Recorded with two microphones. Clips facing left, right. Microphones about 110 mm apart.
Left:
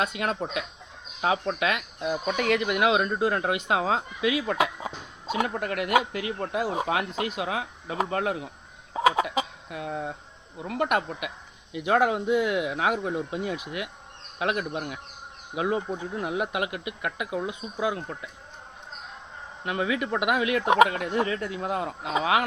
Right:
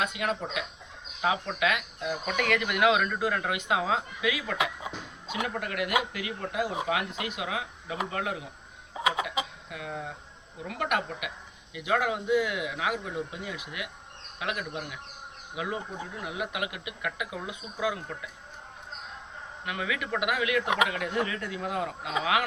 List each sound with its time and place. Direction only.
0.0 s speech: 35° left (ahead or behind)
8.9 s chicken: 40° left (ahead or behind)
10.7 s speech: 30° left (ahead or behind)
19.6 s speech: 30° left (ahead or behind)